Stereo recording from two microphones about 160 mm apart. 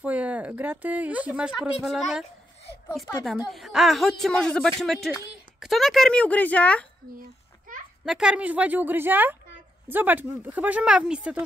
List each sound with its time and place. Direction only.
0.0 s speech: 10° right (ahead or behind)
3.4 s speech: centre (ahead or behind)
7.2 s a sound: 55° right (ahead or behind)
8.0 s speech: 5° right (ahead or behind)